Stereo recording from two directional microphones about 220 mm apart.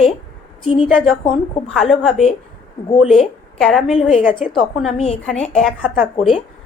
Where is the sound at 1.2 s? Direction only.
5° left (ahead or behind).